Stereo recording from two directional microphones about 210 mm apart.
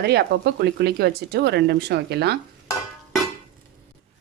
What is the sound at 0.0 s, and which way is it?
Speech, 50° right (ahead or behind).